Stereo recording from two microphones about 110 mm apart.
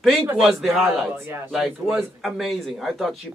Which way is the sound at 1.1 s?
25° right (ahead or behind).